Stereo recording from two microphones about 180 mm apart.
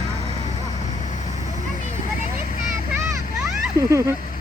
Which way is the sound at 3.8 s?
15° right (ahead or behind).